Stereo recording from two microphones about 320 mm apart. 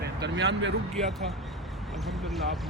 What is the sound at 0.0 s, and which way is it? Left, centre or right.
Speech, right.